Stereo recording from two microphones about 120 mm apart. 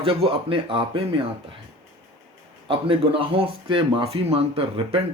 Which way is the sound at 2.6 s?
50° right (ahead or behind).